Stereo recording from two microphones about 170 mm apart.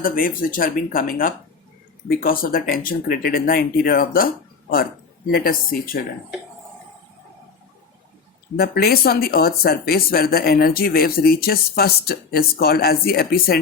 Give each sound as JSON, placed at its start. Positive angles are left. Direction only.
{"t": 0.0, "sound": "speech", "side_deg": 55}
{"t": 5.3, "sound": "speech", "side_deg": 60}
{"t": 8.5, "sound": "speech", "side_deg": 65}